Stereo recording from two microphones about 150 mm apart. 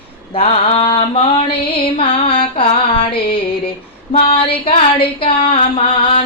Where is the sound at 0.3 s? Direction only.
40° left (ahead or behind).